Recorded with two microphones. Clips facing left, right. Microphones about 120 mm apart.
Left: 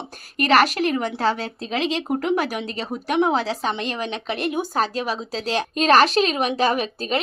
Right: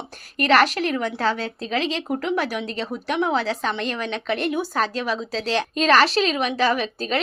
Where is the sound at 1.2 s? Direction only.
40° left (ahead or behind).